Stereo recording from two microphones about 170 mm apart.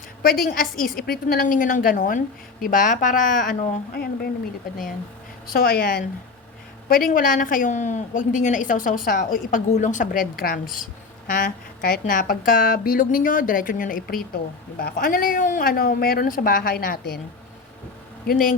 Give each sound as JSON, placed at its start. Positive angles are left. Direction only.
{"t": 0.2, "sound": "a woman's voice", "side_deg": 60}
{"t": 5.5, "sound": "a woman's voice", "side_deg": 65}
{"t": 6.8, "sound": "a woman's voice", "side_deg": 55}
{"t": 18.3, "sound": "a woman's voice", "side_deg": 55}